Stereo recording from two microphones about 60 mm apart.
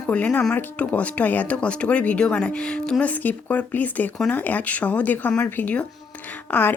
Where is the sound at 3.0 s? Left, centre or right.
Left.